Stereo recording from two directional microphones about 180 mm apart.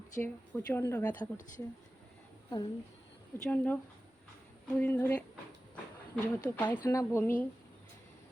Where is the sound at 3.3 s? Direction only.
10° left (ahead or behind).